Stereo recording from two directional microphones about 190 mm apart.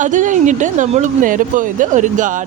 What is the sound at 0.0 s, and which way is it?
Speech, 40° right (ahead or behind).